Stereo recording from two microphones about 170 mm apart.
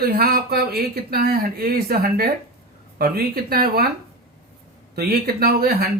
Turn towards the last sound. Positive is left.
turn(degrees=-65)  # may be behind; listen again after turning